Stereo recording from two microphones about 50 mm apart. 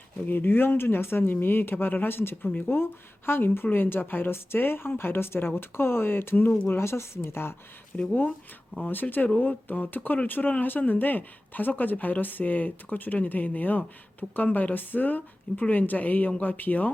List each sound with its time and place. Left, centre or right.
0.3 s speech: left
6.7 s speech: left
7.9 s speech: left
8.9 s speech: left